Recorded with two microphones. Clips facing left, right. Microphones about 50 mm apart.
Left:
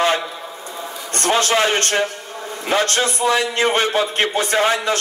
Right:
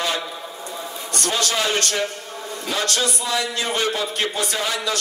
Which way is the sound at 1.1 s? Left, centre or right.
Left.